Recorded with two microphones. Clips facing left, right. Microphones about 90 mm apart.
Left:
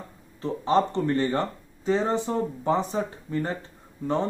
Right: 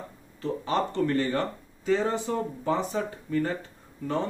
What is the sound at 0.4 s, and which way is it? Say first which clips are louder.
Speech: left 5 dB; 25° left (ahead or behind).